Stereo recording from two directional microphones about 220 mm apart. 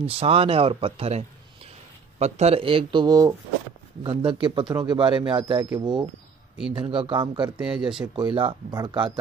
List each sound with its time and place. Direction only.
0.0 s speech: 25° right (ahead or behind)
7.5 s speech: 5° right (ahead or behind)
8.2 s speech: 20° right (ahead or behind)